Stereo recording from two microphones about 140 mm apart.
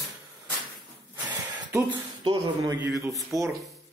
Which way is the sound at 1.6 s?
20° right (ahead or behind).